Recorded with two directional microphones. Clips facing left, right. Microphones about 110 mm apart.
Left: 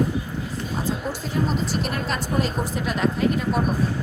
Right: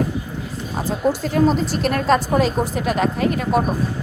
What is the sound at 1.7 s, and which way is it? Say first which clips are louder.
Speech: right 8 dB; 90° right.